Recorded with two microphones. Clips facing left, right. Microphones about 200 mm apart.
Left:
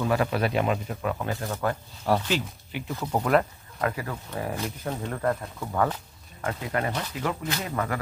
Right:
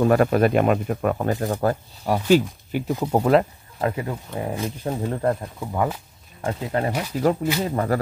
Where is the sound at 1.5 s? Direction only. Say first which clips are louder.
Right 4 dB; 35° right (ahead or behind).